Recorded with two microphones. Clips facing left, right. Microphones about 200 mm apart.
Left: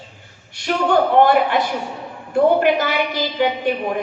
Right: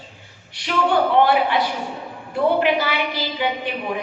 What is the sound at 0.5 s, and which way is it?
A woman's voice, 45° left (ahead or behind).